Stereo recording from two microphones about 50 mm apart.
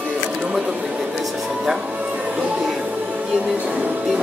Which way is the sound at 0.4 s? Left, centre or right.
Centre.